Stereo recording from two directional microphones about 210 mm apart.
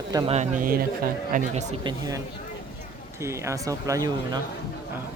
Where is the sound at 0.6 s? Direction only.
40° right (ahead or behind).